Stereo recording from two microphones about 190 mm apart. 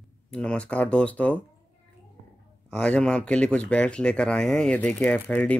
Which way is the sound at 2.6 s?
5° left (ahead or behind).